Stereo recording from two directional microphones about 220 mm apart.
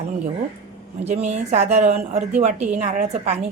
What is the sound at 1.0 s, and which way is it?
A woman's voice, 30° right (ahead or behind).